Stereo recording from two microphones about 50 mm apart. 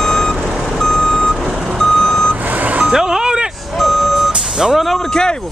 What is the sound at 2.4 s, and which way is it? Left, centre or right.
Reversing beeps, right.